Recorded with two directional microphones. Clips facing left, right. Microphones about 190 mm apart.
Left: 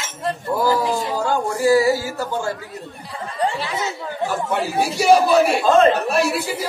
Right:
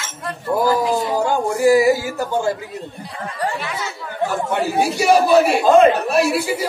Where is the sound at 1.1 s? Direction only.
15° right (ahead or behind).